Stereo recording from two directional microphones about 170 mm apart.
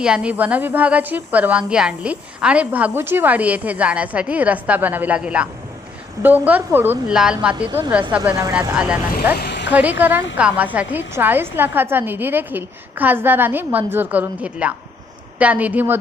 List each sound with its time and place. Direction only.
0.0 s speech: 5° right (ahead or behind)
7.7 s speech: 20° right (ahead or behind)
8.7 s speech: 5° right (ahead or behind)
9.3 s speech: 75° left (ahead or behind)
10.0 s speech: 10° right (ahead or behind)